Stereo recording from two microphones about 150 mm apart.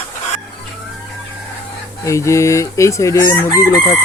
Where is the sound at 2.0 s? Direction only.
20° left (ahead or behind).